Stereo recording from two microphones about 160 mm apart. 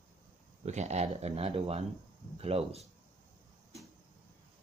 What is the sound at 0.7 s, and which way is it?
Speech, 45° right (ahead or behind).